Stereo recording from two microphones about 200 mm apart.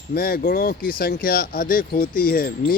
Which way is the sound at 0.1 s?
50° left (ahead or behind).